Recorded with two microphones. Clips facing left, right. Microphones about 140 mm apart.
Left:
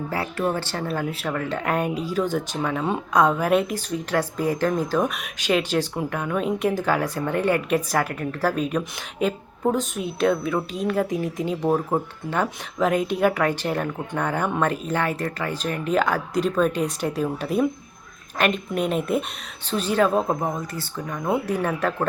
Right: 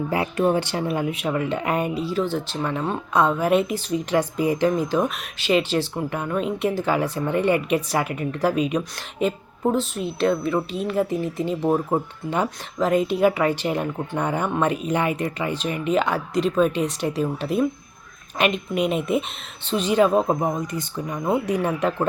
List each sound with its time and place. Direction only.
0.1 s speech: 20° right (ahead or behind)
2.2 s speech: 15° left (ahead or behind)
2.6 s speech: centre (ahead or behind)
5.0 s speech: centre (ahead or behind)